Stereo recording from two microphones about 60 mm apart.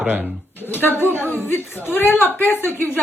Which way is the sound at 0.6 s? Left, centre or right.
Left.